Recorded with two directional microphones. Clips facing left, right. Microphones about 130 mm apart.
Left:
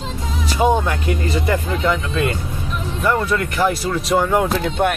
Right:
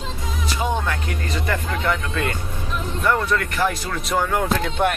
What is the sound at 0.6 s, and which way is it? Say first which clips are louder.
Speech: left 8 dB; 15° left (ahead or behind).